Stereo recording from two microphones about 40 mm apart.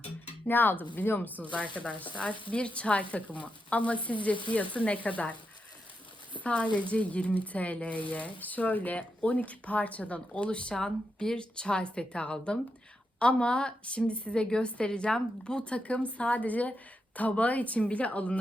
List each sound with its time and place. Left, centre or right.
0.4 s speech: left
1.5 s speech: left
6.4 s speech: left
10.8 s a woman's voice: centre; by 18.3 s left